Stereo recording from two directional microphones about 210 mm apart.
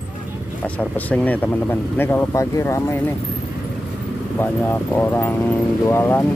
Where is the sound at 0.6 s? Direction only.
5° left (ahead or behind).